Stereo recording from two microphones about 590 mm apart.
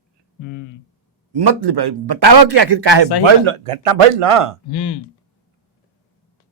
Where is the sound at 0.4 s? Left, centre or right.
Left.